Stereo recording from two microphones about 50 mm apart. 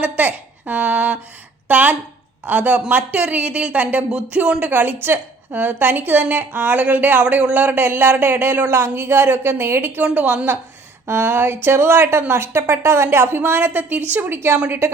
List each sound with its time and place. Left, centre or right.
0.0 s a woman's voice: right
11.0 s speech: right
13.9 s a woman's voice: right
14.3 s speech: right